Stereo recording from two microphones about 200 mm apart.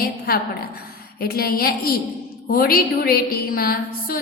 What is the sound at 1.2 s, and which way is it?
A woman's voice, 50° left (ahead or behind).